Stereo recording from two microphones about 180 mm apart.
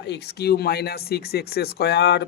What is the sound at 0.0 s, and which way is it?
Speech, 70° left (ahead or behind).